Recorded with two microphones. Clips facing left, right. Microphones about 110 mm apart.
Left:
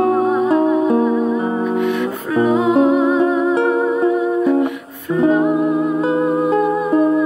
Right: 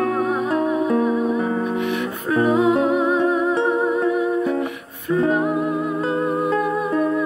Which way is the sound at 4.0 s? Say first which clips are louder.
Left 4 dB; 15° left (ahead or behind).